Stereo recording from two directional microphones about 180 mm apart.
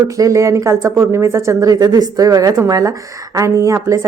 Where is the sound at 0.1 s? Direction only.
20° right (ahead or behind).